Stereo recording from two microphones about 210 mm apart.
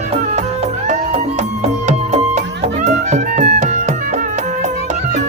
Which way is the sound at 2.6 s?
35° right (ahead or behind).